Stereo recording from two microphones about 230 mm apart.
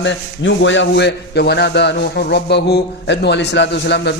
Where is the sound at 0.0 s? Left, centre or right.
Left.